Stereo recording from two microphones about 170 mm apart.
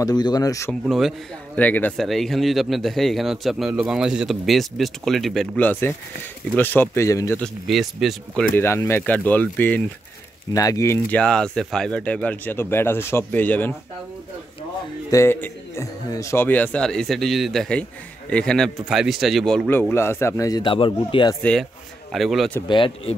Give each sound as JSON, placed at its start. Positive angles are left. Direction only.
{"t": 0.0, "sound": "speech", "side_deg": 25}
{"t": 0.8, "sound": "speech", "side_deg": 0}
{"t": 7.4, "sound": "speech", "side_deg": 0}
{"t": 8.5, "sound": "speech", "side_deg": 15}
{"t": 15.0, "sound": "speech", "side_deg": 15}
{"t": 21.4, "sound": "speech", "side_deg": 5}
{"t": 22.7, "sound": "speech", "side_deg": 30}